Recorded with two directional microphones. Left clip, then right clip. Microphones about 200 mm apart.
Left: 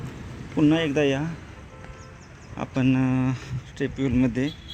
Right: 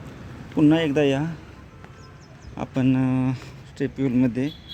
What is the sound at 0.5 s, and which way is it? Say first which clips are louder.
Speech: right 2 dB; 20° right (ahead or behind).